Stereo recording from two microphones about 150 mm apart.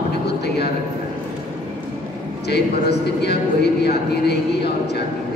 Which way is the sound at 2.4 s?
90° left.